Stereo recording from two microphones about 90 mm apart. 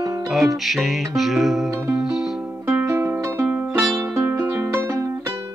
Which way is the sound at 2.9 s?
35° right (ahead or behind).